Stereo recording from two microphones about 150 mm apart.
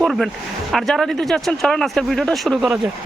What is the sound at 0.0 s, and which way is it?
Speech, centre (ahead or behind).